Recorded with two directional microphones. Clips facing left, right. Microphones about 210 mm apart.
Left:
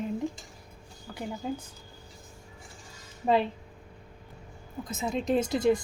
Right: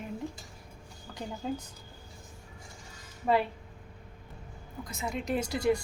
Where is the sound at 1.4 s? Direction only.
15° left (ahead or behind).